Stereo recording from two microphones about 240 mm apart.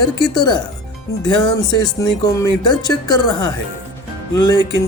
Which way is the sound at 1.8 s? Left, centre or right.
Centre.